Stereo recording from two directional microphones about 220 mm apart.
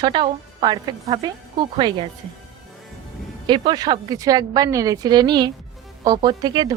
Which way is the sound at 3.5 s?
20° right (ahead or behind).